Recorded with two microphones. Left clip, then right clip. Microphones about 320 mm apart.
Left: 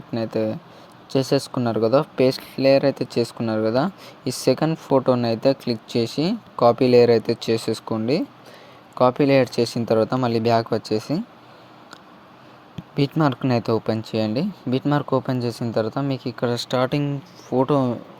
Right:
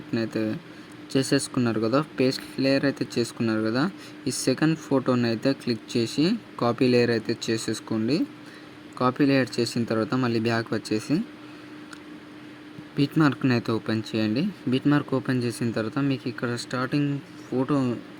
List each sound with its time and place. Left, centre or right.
0.1 s speech: centre
13.0 s speech: centre